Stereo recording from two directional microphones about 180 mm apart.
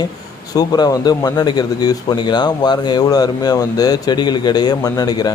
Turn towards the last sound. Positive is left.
turn(degrees=20)  # may be behind; listen again after turning